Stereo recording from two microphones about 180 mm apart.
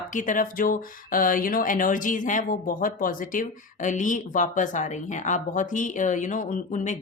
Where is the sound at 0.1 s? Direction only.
45° left (ahead or behind).